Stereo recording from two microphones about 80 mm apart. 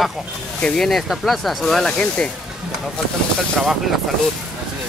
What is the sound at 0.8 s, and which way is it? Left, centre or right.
Speech, centre.